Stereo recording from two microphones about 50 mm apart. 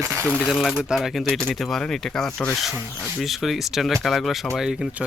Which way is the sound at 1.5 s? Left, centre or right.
Centre.